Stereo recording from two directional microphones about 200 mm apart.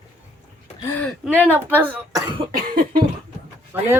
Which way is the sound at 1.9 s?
20° right (ahead or behind).